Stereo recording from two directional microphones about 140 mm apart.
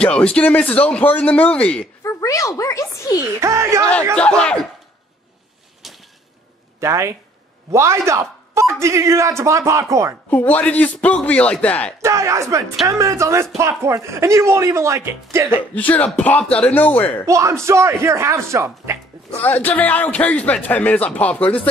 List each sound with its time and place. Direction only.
0.0 s a man's voice: 10° left (ahead or behind)
2.0 s a child's voice: 25° left (ahead or behind)
3.2 s speech: 20° right (ahead or behind)
4.2 s a man's voice: 5° left (ahead or behind)
6.8 s speech: 20° right (ahead or behind)
10.3 s a man's voice: 10° left (ahead or behind)
12.0 s speech: 20° right (ahead or behind)
15.7 s a man's voice: 10° left (ahead or behind)
17.3 s speech: 20° right (ahead or behind)
19.4 s a man's voice: 10° left (ahead or behind)